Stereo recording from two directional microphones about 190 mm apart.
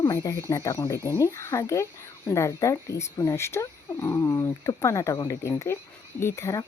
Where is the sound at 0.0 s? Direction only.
20° left (ahead or behind).